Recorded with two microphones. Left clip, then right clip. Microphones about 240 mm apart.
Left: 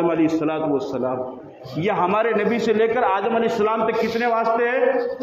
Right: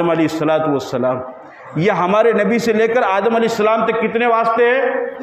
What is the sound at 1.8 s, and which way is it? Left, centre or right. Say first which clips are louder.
A man's voice: right 6 dB; right.